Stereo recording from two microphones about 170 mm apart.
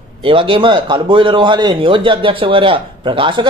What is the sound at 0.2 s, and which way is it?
A man's voice, 30° right (ahead or behind).